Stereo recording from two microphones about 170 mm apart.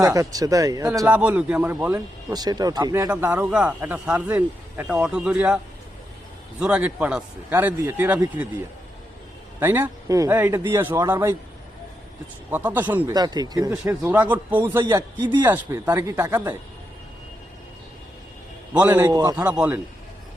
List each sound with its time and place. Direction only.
0.0 s speech: 20° right (ahead or behind)
1.0 s a man's voice: 10° right (ahead or behind)
2.3 s speech: 25° right (ahead or behind)
3.1 s a man's voice: 10° right (ahead or behind)
6.6 s a man's voice: 5° right (ahead or behind)
9.6 s a man's voice: 10° right (ahead or behind)
12.5 s a man's voice: 10° right (ahead or behind)
13.1 s speech: 25° right (ahead or behind)
13.8 s a man's voice: 10° right (ahead or behind)
14.8 s speech: 25° right (ahead or behind)
15.4 s a man's voice: 10° right (ahead or behind)
18.7 s a man's voice: 10° right (ahead or behind)
19.0 s speech: 20° right (ahead or behind)
19.5 s a man's voice: 10° right (ahead or behind)